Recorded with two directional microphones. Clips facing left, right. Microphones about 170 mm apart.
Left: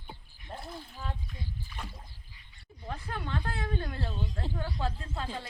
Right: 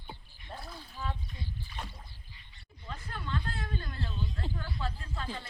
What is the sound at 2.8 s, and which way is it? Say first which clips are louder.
Speech: left 4 dB; 65° left (ahead or behind).